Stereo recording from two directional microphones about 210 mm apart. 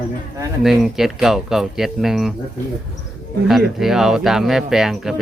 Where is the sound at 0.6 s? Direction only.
Centre (ahead or behind).